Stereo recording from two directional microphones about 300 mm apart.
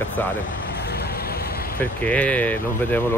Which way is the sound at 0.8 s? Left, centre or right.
Left.